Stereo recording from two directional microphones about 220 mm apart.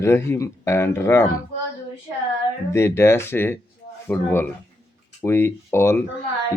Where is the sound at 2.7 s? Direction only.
10° left (ahead or behind).